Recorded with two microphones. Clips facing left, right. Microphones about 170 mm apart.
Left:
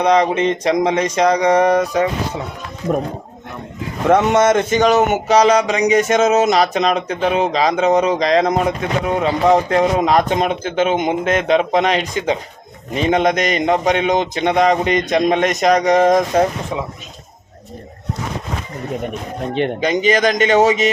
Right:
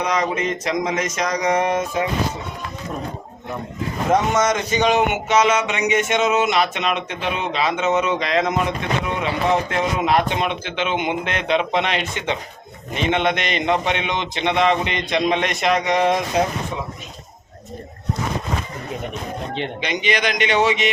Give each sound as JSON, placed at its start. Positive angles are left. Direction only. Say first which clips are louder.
{"t": 0.0, "sound": "speech", "louder": "left 7 dB", "side_deg": 30}
{"t": 4.1, "sound": "speech", "louder": "left 6 dB", "side_deg": 65}
{"t": 19.5, "sound": "speech", "louder": "left 10 dB", "side_deg": 50}